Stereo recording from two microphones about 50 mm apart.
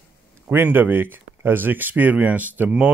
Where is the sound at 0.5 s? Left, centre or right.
Right.